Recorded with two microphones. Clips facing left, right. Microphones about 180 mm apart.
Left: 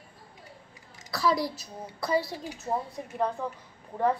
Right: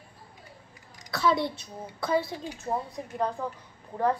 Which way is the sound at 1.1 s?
Centre (ahead or behind).